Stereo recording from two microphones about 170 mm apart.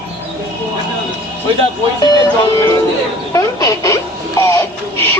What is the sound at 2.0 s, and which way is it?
Speech, 25° left (ahead or behind).